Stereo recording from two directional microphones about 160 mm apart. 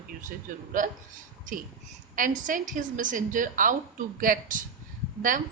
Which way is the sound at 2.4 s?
55° right (ahead or behind).